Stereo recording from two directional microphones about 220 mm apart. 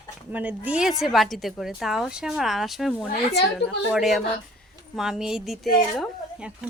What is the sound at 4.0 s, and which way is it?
A woman's voice, centre (ahead or behind).